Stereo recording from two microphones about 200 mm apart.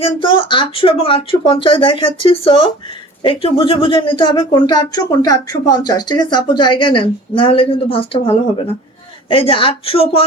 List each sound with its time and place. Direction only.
0.0 s speech: 25° left (ahead or behind)
9.3 s speech: 25° left (ahead or behind)